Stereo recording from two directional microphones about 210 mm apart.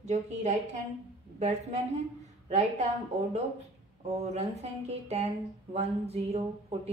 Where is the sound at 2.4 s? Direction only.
30° right (ahead or behind).